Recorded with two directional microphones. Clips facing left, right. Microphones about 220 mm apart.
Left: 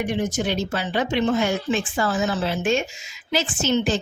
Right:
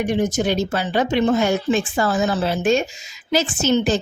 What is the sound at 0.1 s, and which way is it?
A woman's voice, 45° right (ahead or behind).